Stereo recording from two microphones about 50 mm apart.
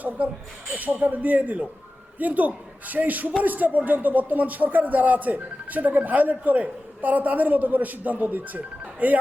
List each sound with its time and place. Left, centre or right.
0.8 s speech: right